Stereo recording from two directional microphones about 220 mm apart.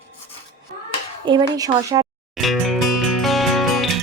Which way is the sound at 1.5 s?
15° right (ahead or behind).